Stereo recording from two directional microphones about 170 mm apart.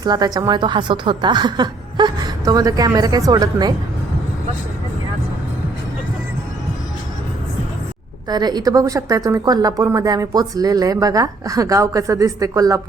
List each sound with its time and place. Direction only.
0.0 s a woman's voice: 25° right (ahead or behind)
8.3 s a woman's voice: 25° right (ahead or behind)